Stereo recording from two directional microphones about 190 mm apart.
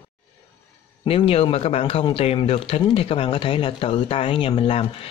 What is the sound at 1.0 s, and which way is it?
Speech, 30° left (ahead or behind).